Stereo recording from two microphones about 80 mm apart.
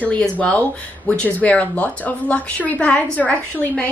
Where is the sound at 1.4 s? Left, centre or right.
Centre.